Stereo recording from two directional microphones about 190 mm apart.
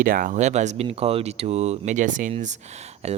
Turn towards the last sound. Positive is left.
turn(degrees=-35)  # may be behind; listen again after turning